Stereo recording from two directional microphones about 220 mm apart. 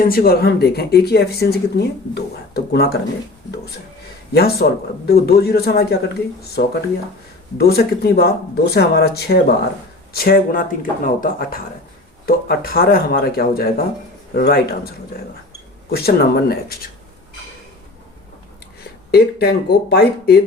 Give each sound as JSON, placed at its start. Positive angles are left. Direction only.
{"t": 0.0, "sound": "speech", "side_deg": 40}
{"t": 4.4, "sound": "speech", "side_deg": 45}
{"t": 7.6, "sound": "speech", "side_deg": 45}
{"t": 19.1, "sound": "speech", "side_deg": 45}